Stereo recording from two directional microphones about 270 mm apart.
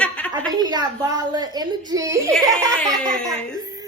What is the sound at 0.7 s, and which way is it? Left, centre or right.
Speech, centre.